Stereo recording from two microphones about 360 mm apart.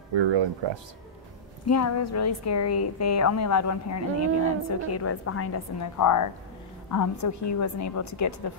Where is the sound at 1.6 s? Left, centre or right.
Left.